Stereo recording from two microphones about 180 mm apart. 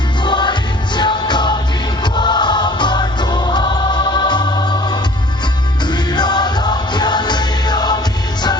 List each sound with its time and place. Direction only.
0.3 s music: 25° left (ahead or behind)